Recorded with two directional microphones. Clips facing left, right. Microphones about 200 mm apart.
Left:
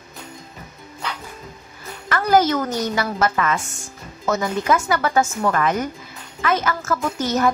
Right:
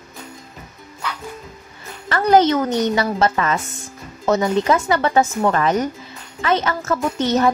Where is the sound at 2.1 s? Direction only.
30° right (ahead or behind).